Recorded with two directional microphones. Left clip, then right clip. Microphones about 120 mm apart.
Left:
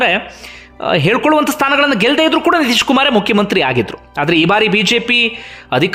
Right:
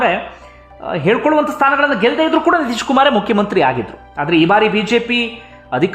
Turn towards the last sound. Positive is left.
turn(degrees=20)  # may be behind; listen again after turning